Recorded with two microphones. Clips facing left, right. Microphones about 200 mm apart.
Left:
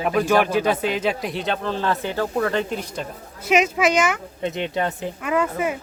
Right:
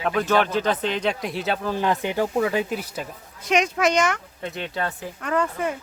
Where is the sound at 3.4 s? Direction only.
5° left (ahead or behind).